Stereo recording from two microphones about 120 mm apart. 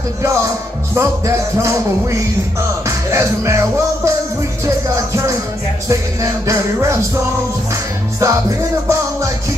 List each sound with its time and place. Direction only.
0.2 s music: 25° right (ahead or behind)
8.2 s music: 25° right (ahead or behind)